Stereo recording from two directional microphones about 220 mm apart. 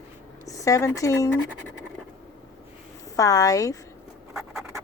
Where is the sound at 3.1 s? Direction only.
15° left (ahead or behind).